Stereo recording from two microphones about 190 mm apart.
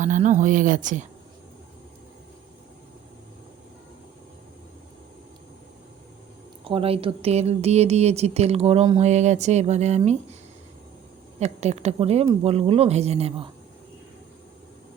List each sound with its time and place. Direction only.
0.0 s speech: 40° right (ahead or behind)
6.7 s speech: 30° right (ahead or behind)
11.3 s speech: 35° right (ahead or behind)